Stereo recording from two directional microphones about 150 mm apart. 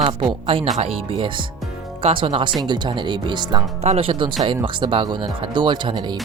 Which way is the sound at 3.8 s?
45° right (ahead or behind).